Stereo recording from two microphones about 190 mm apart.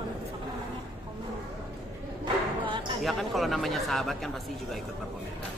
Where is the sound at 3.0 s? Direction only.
Centre (ahead or behind).